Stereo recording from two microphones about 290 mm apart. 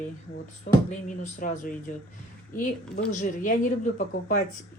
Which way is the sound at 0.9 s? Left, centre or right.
Left.